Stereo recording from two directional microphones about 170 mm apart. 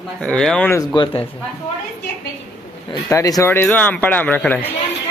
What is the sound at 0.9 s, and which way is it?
Speech, 25° left (ahead or behind).